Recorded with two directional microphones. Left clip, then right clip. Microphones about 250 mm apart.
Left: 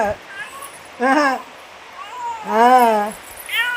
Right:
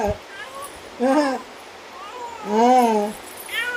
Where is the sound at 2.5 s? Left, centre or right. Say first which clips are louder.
Left 4 dB; centre.